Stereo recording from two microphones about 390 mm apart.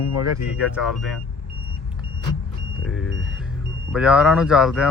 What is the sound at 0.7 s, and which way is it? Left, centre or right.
Speech, centre.